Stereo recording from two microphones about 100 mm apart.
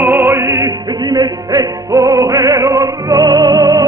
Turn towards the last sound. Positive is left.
turn(degrees=-40)  # may be behind; listen again after turning